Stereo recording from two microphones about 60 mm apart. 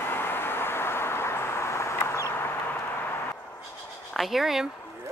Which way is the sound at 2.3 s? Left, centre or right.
Left.